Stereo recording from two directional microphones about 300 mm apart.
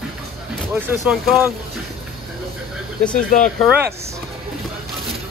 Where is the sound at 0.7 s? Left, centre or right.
Centre.